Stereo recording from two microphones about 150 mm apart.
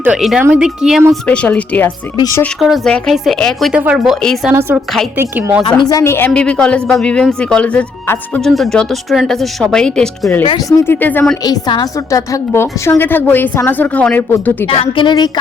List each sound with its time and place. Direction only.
0.0 s speech: 5° right (ahead or behind)
1.1 s a woman's voice: 5° left (ahead or behind)
2.1 s speech: 25° left (ahead or behind)
2.6 s speech: centre (ahead or behind)
5.1 s a woman's voice: 15° right (ahead or behind)
5.9 s a woman's voice: 20° left (ahead or behind)
8.4 s a woman's voice: centre (ahead or behind)
11.4 s a woman's voice: 25° left (ahead or behind)
14.7 s a woman's voice: 35° left (ahead or behind)